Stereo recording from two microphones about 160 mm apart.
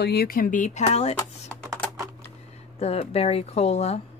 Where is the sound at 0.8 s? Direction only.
40° left (ahead or behind).